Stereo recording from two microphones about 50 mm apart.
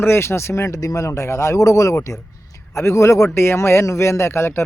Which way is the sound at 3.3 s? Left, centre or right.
Left.